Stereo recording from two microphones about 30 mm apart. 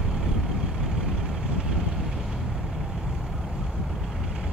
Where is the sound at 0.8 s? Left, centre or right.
Centre.